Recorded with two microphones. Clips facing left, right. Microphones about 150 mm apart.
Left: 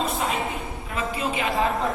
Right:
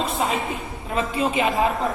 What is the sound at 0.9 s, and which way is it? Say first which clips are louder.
Speech: right 5 dB; 25° right (ahead or behind).